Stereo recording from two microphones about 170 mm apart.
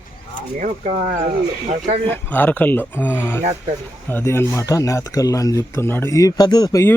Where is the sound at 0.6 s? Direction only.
50° right (ahead or behind).